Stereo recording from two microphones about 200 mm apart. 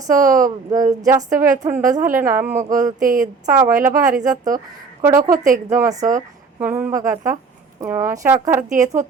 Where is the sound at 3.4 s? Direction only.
15° right (ahead or behind).